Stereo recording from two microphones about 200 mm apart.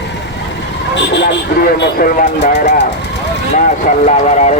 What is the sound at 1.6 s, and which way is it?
Speech, 45° left (ahead or behind).